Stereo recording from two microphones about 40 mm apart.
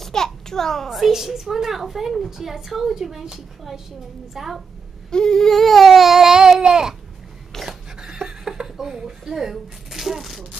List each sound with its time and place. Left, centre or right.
0.0 s a sound: centre
0.8 s a woman's voice: centre
5.1 s baby cry: centre
6.6 s a woman's voice: centre
7.5 s dog: centre
8.0 s a sound: centre